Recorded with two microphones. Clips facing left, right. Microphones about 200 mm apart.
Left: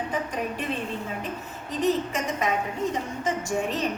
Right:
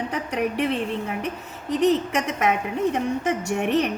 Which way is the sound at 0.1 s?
70° right (ahead or behind).